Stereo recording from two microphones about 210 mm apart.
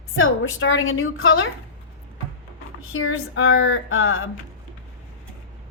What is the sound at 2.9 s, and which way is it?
A woman's voice, 75° left (ahead or behind).